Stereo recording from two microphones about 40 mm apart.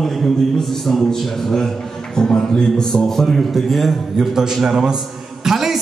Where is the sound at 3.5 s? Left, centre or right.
Centre.